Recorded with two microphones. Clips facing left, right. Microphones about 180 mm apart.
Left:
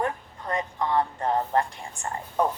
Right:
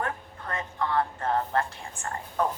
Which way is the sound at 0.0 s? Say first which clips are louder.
Left 4 dB; 15° left (ahead or behind).